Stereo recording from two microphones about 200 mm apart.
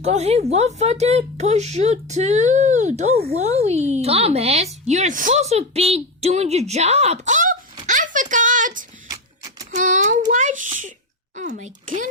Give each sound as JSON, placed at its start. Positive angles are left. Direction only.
{"t": 0.0, "sound": "a woman's voice", "side_deg": -35}
{"t": 7.9, "sound": "a sound", "side_deg": -40}
{"t": 11.3, "sound": "a child's voice", "side_deg": -40}